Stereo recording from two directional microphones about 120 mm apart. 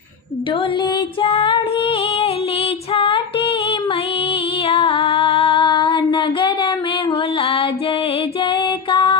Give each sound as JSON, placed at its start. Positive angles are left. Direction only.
{"t": 0.8, "sound": "female singing", "side_deg": 45}
{"t": 8.4, "sound": "music", "side_deg": 45}